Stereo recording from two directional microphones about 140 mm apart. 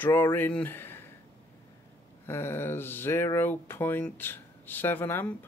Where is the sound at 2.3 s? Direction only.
15° left (ahead or behind).